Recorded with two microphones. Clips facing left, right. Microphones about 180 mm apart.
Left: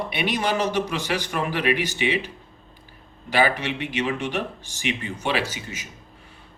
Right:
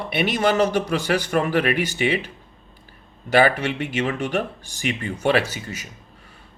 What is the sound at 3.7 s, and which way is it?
Speech, 45° right (ahead or behind).